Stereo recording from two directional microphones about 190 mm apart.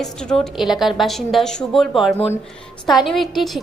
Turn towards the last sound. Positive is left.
turn(degrees=0)  # may be behind; listen again after turning